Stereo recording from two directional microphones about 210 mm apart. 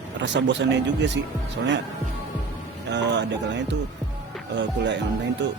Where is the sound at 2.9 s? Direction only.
55° right (ahead or behind).